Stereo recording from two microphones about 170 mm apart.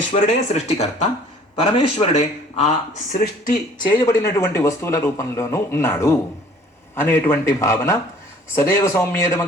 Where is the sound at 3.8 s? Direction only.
20° left (ahead or behind).